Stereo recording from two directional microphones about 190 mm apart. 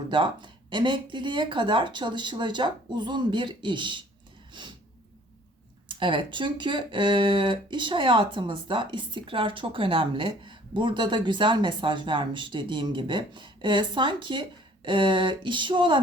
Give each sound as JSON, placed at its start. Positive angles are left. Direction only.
{"t": 0.1, "sound": "speech", "side_deg": -25}
{"t": 5.9, "sound": "speech", "side_deg": -25}